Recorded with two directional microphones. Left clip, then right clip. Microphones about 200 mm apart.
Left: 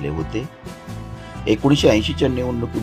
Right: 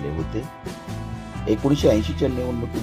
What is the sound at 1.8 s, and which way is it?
Speech, 15° left (ahead or behind).